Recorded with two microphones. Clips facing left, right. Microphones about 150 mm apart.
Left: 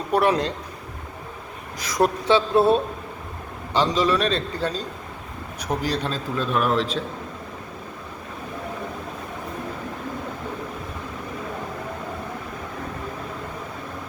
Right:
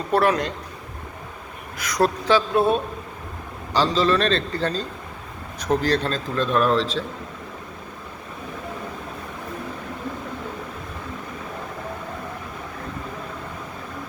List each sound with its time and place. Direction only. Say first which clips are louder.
0.1 s speech: even; 20° left (ahead or behind)
1.8 s speech: even; 25° left (ahead or behind)
3.8 s speech: right 1 dB; 15° left (ahead or behind)